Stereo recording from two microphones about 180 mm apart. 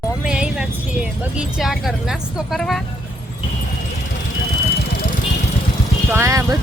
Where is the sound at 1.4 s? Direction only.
5° right (ahead or behind).